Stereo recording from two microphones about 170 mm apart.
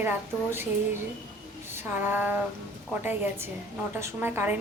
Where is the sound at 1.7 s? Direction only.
10° right (ahead or behind).